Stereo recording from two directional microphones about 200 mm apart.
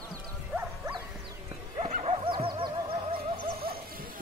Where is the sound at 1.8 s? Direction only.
35° right (ahead or behind).